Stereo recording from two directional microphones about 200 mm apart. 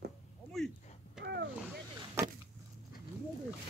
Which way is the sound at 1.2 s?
55° right (ahead or behind).